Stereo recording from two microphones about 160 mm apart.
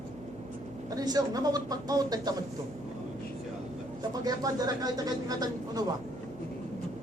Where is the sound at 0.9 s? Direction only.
25° right (ahead or behind).